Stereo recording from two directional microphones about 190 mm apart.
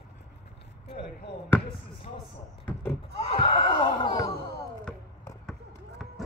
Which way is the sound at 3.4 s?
25° left (ahead or behind).